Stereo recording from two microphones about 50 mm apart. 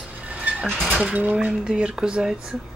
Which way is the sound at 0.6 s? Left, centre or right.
Centre.